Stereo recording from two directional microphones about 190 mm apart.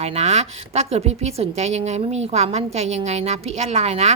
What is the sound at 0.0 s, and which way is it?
A woman's voice, 35° right (ahead or behind).